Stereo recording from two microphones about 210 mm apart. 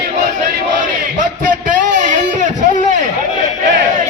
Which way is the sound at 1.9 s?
35° right (ahead or behind).